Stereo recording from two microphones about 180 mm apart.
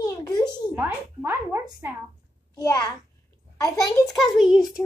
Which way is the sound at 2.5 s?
20° left (ahead or behind).